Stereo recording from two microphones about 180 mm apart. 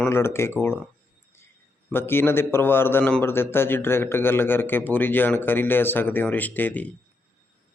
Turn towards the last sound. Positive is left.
turn(degrees=10)  # may be behind; listen again after turning